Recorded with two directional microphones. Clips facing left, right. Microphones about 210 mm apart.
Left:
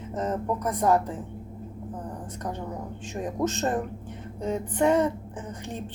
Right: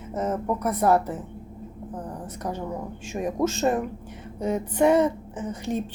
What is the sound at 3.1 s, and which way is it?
Speech, 10° right (ahead or behind).